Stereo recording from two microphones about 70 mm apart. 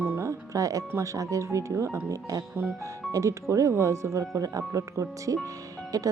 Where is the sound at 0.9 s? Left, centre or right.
Right.